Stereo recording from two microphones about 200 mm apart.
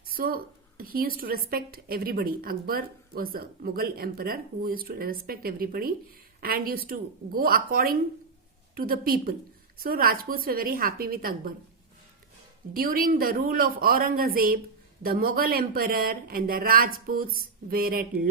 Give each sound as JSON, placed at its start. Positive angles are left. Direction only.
{"t": 0.1, "sound": "a woman's voice", "side_deg": -45}
{"t": 12.7, "sound": "a woman's voice", "side_deg": -45}